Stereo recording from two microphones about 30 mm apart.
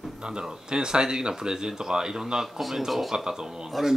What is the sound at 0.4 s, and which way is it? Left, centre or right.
Speech, right.